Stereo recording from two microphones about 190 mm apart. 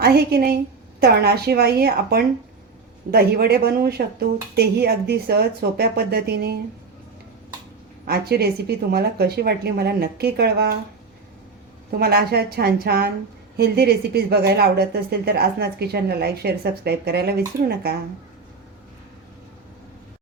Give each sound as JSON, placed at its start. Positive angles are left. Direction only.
{"t": 0.0, "sound": "a woman's voice", "side_deg": -55}
{"t": 8.0, "sound": "a woman's voice", "side_deg": -55}
{"t": 11.9, "sound": "a woman's voice", "side_deg": -55}